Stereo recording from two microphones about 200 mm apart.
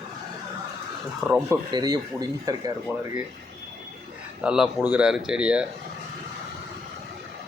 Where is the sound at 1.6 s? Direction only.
20° right (ahead or behind).